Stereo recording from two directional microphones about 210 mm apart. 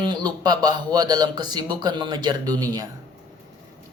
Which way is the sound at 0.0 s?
20° right (ahead or behind).